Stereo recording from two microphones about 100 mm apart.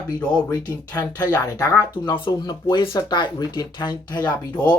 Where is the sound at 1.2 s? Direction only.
40° left (ahead or behind).